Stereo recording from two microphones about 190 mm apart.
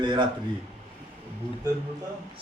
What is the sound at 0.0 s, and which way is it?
Speech, 25° right (ahead or behind).